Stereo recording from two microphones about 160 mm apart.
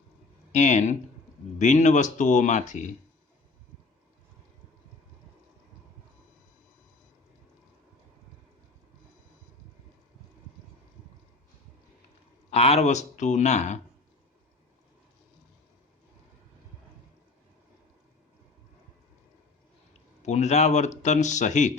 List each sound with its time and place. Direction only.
0.5 s speech: 45° left (ahead or behind)
12.5 s speech: 40° left (ahead or behind)
20.2 s speech: 45° left (ahead or behind)